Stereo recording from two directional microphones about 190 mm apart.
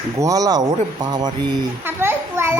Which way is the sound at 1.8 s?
10° right (ahead or behind).